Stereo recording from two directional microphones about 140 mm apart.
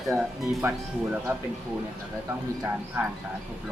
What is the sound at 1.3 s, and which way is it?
Speech, 15° right (ahead or behind).